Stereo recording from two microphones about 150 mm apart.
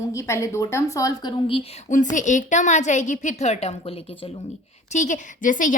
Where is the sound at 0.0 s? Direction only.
20° left (ahead or behind).